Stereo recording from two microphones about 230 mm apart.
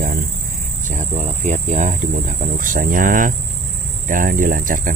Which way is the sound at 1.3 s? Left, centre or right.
Right.